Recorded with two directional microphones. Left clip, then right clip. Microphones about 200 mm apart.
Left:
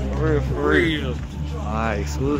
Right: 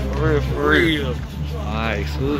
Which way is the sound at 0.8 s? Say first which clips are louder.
Right 3 dB; 35° right (ahead or behind).